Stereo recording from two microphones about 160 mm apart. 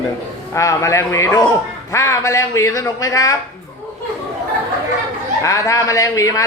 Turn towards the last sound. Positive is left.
turn(degrees=20)  # may be behind; listen again after turning